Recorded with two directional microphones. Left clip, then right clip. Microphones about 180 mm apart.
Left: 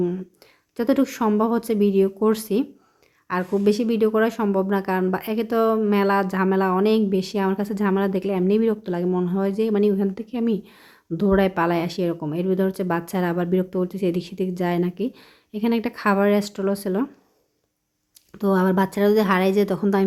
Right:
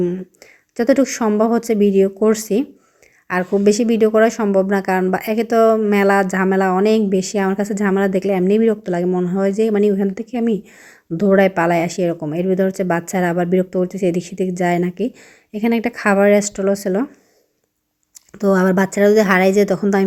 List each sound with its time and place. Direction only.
0.0 s speech: 5° right (ahead or behind)
18.3 s speech: 15° right (ahead or behind)